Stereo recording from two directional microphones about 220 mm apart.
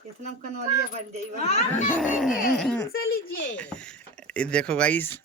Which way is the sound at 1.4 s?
30° left (ahead or behind).